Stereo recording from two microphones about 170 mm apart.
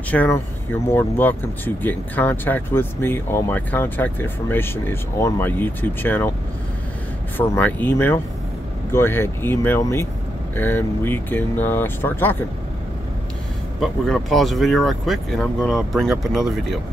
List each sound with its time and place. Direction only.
0.1 s speech: 10° left (ahead or behind)
7.3 s speech: 10° left (ahead or behind)
13.7 s speech: centre (ahead or behind)